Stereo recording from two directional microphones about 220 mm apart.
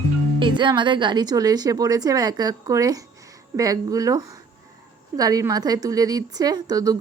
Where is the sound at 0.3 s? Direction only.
20° right (ahead or behind).